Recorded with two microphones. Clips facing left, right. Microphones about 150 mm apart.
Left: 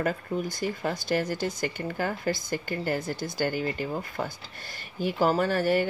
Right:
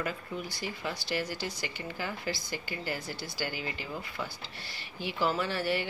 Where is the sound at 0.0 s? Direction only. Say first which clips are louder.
Left 7 dB; 45° left (ahead or behind).